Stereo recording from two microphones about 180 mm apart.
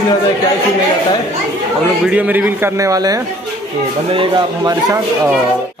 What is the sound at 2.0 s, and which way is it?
A man's voice, 10° right (ahead or behind).